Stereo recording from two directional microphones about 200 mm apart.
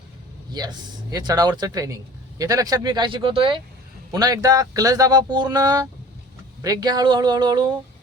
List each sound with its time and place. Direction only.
0.6 s speech: 20° right (ahead or behind)